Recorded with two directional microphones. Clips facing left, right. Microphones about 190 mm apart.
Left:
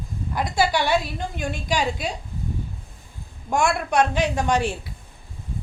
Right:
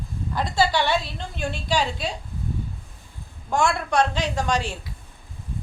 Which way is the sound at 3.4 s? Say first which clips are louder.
Left 1 dB; 15° left (ahead or behind).